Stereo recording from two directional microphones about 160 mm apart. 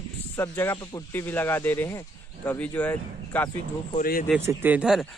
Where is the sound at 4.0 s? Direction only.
60° left (ahead or behind).